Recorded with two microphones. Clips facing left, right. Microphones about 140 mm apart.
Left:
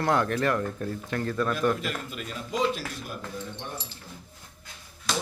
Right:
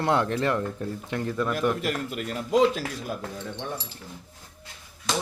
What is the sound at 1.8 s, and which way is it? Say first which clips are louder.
Speech: right 5 dB; 65° right (ahead or behind).